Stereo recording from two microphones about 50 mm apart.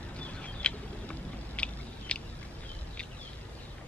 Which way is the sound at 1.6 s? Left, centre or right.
Left.